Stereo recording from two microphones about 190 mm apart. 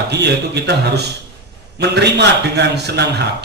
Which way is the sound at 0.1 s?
60° right (ahead or behind).